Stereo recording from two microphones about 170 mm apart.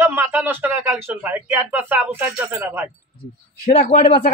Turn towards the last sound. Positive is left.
turn(degrees=50)  # may be behind; listen again after turning